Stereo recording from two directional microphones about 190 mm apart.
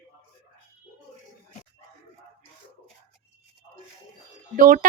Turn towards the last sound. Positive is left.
turn(degrees=-45)  # may be behind; listen again after turning